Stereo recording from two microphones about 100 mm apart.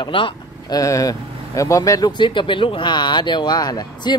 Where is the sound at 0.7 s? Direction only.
35° left (ahead or behind).